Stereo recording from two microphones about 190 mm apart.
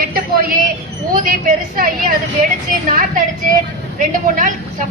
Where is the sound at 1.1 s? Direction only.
45° right (ahead or behind).